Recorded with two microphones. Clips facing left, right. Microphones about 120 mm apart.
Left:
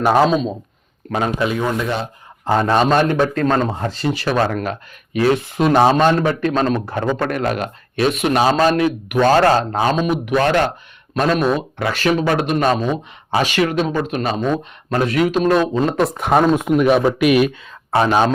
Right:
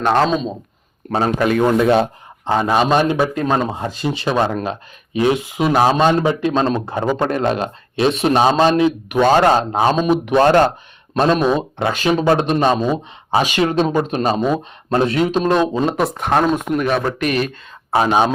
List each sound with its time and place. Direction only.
0.0 s speech: 5° left (ahead or behind)
1.1 s a man's voice: 35° right (ahead or behind)
1.5 s speech: 55° right (ahead or behind)
2.4 s speech: 5° right (ahead or behind)
7.3 s a man's voice: 25° right (ahead or behind)
10.1 s a man's voice: 30° right (ahead or behind)
16.2 s speech: 5° left (ahead or behind)
17.9 s speech: 15° right (ahead or behind)